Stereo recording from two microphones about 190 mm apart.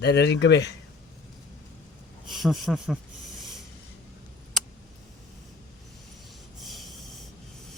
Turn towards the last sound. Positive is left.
turn(degrees=0)  # may be behind; listen again after turning